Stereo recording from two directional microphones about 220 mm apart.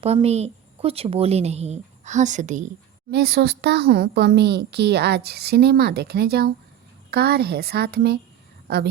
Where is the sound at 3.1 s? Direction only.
45° right (ahead or behind).